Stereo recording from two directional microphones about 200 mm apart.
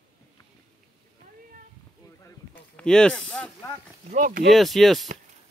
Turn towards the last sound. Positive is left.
turn(degrees=0)  # may be behind; listen again after turning